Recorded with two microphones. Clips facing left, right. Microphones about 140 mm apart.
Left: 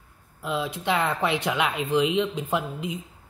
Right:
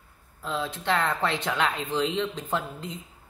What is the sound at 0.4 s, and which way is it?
Speech, 10° left (ahead or behind).